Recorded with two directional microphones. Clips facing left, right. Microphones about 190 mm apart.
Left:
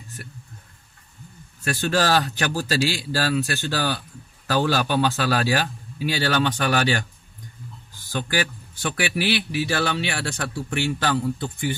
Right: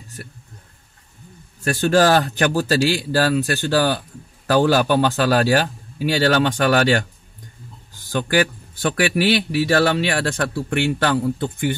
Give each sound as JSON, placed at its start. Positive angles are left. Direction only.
{"t": 1.6, "sound": "a man's voice", "side_deg": -45}
{"t": 8.1, "sound": "a man's voice", "side_deg": -50}